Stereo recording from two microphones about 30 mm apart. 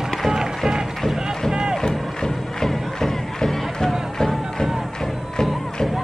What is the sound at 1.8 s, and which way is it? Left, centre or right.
Music, left.